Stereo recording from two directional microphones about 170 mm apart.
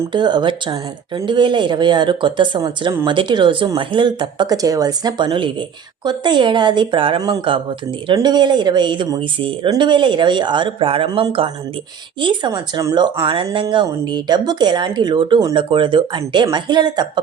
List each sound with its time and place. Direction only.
0.1 s speech: 25° right (ahead or behind)